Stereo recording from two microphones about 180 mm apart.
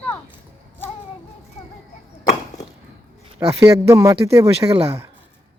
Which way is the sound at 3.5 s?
15° right (ahead or behind).